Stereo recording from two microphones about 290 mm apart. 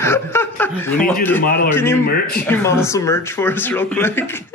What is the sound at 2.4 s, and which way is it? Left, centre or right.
Speech, centre.